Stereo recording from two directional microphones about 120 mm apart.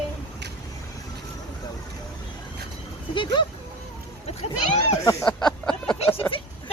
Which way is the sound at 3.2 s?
40° left (ahead or behind).